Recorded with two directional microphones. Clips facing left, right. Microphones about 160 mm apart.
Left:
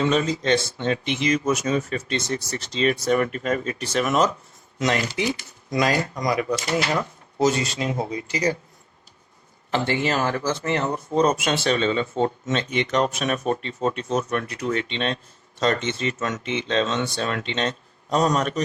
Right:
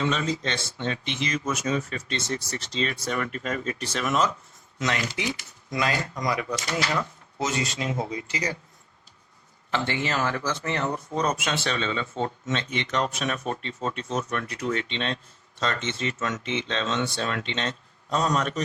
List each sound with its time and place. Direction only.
0.0 s speech: 40° left (ahead or behind)
1.0 s speech: 10° left (ahead or behind)
1.6 s speech: 40° left (ahead or behind)
4.8 s speech: 35° left (ahead or behind)
9.7 s speech: 35° left (ahead or behind)
13.1 s speech: 20° left (ahead or behind)
13.9 s speech: 45° left (ahead or behind)